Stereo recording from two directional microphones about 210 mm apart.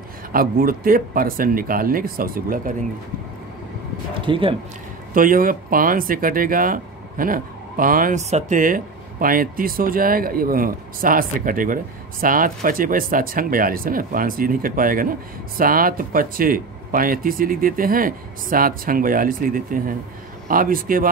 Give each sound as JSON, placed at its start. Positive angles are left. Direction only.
{"t": 0.3, "sound": "speech", "side_deg": -45}
{"t": 4.1, "sound": "speech", "side_deg": -25}
{"t": 5.1, "sound": "speech", "side_deg": -40}